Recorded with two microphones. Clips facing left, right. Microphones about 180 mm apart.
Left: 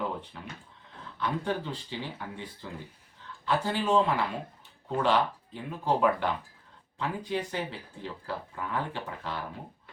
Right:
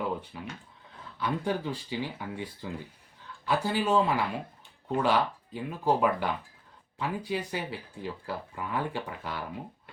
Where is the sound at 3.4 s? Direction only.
10° right (ahead or behind).